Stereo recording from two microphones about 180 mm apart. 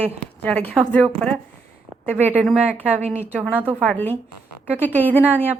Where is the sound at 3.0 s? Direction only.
35° right (ahead or behind).